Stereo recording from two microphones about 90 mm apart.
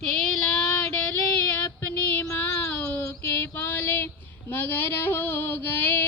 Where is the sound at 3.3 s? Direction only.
20° left (ahead or behind).